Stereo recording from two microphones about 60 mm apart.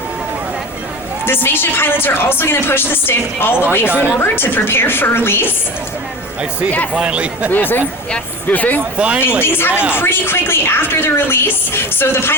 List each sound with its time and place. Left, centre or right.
1.2 s a woman's voice: left
6.9 s speech: centre
7.5 s a woman's voice: left
9.0 s speech: centre
9.4 s a woman's voice: left